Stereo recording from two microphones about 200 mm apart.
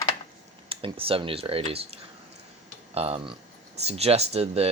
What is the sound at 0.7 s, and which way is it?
Speech, 25° right (ahead or behind).